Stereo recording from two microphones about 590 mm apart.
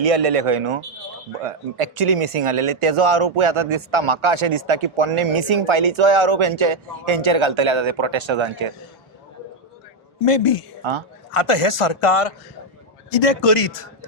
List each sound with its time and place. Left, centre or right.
0.0 s speech: right
10.2 s a man's voice: left
13.1 s a man's voice: left